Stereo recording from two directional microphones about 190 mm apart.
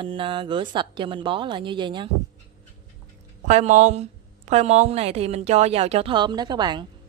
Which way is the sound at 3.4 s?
40° right (ahead or behind).